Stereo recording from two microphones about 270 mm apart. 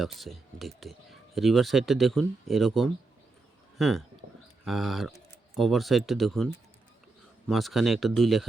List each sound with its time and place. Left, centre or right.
0.0 s speech: centre